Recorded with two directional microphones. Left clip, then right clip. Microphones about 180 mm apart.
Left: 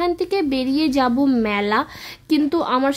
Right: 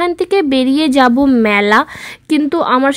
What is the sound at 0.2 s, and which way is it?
A woman's voice, 30° right (ahead or behind).